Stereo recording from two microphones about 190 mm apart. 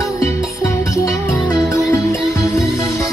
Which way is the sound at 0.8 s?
15° left (ahead or behind).